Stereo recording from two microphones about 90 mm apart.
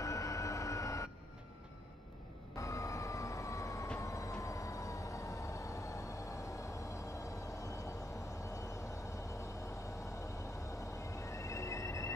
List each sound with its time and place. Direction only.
0.0 s a sound: 35° left (ahead or behind)
2.5 s vehicle: 35° left (ahead or behind)
4.0 s train: 35° left (ahead or behind)
7.2 s vehicle: 35° left (ahead or behind)
10.8 s train: 35° left (ahead or behind)